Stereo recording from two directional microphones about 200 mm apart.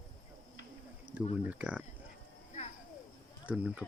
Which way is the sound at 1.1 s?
10° right (ahead or behind).